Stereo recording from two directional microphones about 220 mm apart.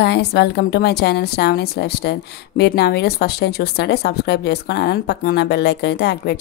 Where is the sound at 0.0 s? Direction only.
50° left (ahead or behind).